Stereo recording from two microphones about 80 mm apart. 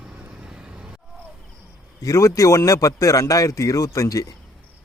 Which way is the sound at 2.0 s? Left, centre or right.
Left.